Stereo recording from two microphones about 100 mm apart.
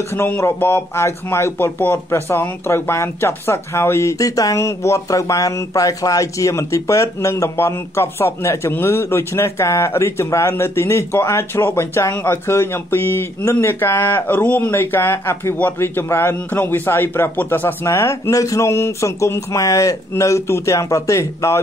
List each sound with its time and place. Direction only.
0.1 s speech: 25° left (ahead or behind)